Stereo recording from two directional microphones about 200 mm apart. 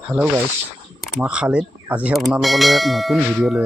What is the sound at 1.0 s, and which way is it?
Speech, 5° right (ahead or behind).